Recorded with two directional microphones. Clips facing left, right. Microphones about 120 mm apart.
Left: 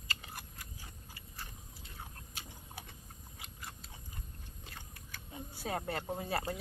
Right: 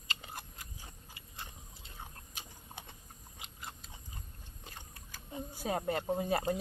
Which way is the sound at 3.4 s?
20° right (ahead or behind).